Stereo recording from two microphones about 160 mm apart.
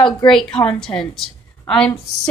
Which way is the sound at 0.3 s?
5° left (ahead or behind).